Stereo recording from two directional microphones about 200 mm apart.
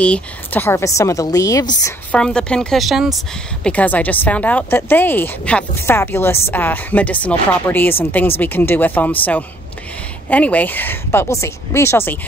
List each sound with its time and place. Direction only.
0.0 s speech: 5° left (ahead or behind)
2.1 s a woman's voice: 5° left (ahead or behind)